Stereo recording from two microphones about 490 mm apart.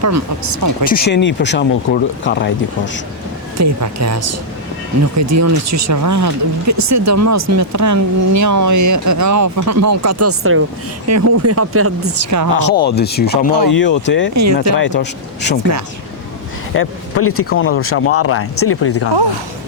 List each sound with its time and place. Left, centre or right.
0.0 s speech: right
0.9 s speech: centre
3.6 s speech: right
12.7 s speech: centre
14.3 s speech: right
14.8 s speech: left
16.7 s speech: left